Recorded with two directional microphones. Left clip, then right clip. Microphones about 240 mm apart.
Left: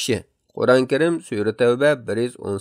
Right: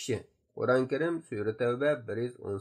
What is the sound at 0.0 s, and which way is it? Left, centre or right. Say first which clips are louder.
Speech: left 11 dB; left.